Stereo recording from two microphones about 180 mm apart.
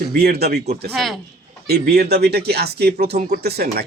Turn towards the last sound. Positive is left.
turn(degrees=-60)  # may be behind; listen again after turning